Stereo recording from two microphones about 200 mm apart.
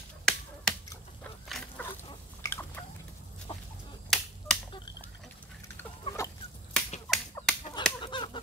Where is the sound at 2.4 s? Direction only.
10° left (ahead or behind).